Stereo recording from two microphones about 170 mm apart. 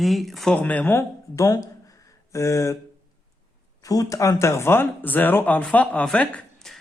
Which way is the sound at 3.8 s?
20° left (ahead or behind).